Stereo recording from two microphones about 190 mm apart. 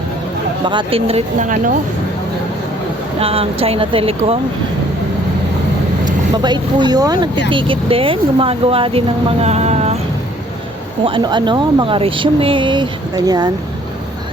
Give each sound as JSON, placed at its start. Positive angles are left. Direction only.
{"t": 0.6, "sound": "speech", "side_deg": -25}
{"t": 3.2, "sound": "speech", "side_deg": -30}
{"t": 6.3, "sound": "speech", "side_deg": -25}
{"t": 11.0, "sound": "speech", "side_deg": -25}